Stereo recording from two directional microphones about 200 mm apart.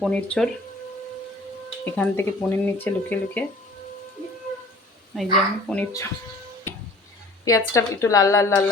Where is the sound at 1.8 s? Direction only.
10° left (ahead or behind).